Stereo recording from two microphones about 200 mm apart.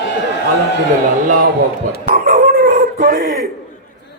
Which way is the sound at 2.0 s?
45° right (ahead or behind).